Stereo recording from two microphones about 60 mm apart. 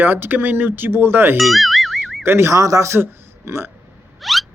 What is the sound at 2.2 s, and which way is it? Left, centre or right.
Speech, right.